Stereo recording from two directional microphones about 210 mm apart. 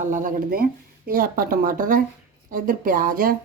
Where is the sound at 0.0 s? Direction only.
40° right (ahead or behind).